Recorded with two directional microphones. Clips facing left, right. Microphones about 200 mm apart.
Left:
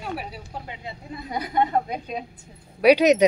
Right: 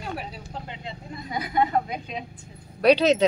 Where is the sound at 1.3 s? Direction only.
40° left (ahead or behind).